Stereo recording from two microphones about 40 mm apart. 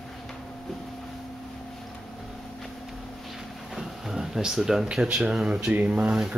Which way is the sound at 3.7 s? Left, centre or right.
Centre.